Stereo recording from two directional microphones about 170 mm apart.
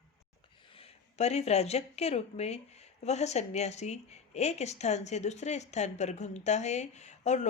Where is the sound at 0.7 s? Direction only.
35° left (ahead or behind).